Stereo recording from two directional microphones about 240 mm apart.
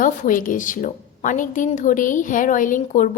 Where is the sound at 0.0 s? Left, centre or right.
Left.